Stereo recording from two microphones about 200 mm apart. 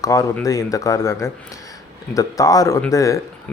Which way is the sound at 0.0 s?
15° left (ahead or behind).